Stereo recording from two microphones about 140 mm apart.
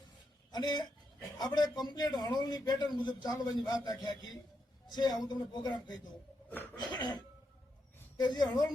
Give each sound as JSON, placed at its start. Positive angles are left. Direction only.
{"t": 0.5, "sound": "a man's voice", "side_deg": 30}
{"t": 6.7, "sound": "cough", "side_deg": 30}
{"t": 8.2, "sound": "a man's voice", "side_deg": 30}